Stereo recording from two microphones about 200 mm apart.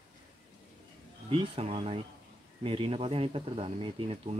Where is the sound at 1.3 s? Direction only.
30° right (ahead or behind).